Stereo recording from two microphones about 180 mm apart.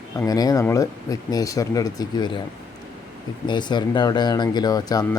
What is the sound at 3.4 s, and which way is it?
Speech, 25° left (ahead or behind).